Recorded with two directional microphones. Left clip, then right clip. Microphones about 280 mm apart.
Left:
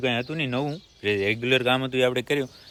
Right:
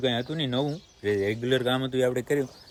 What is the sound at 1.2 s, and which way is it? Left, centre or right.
Speech, left.